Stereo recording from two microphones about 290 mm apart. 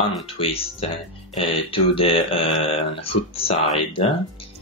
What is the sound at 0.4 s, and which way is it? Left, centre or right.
Speech, centre.